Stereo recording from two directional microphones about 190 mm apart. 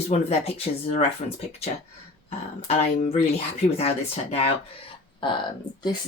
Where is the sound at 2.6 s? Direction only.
35° left (ahead or behind).